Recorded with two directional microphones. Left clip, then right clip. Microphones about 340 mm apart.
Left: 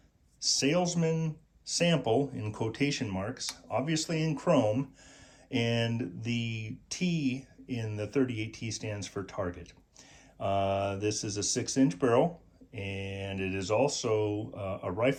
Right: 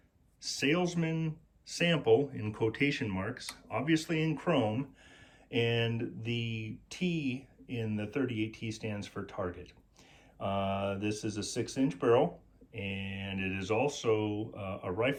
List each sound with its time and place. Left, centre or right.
0.4 s speech: centre
5.5 s mantra: centre
12.7 s speech: centre